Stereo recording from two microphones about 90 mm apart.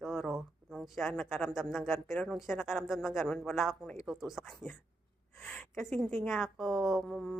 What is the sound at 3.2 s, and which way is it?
Speech, 10° left (ahead or behind).